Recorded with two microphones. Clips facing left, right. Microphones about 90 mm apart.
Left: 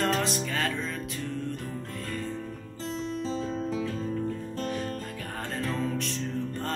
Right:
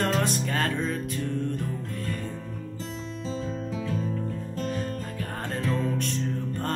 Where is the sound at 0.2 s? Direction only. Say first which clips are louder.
Right 2 dB; 45° right (ahead or behind).